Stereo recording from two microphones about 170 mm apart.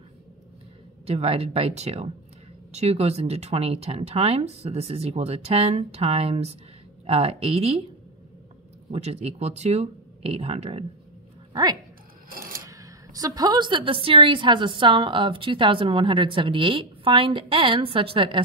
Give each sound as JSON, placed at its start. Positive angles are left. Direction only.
{"t": 1.0, "sound": "speech", "side_deg": -35}
{"t": 8.9, "sound": "speech", "side_deg": -40}
{"t": 11.5, "sound": "speech", "side_deg": -25}
{"t": 12.3, "sound": "filing", "side_deg": -60}
{"t": 12.6, "sound": "a woman's voice", "side_deg": -20}